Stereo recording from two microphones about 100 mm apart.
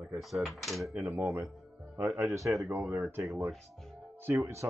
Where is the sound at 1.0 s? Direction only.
25° right (ahead or behind).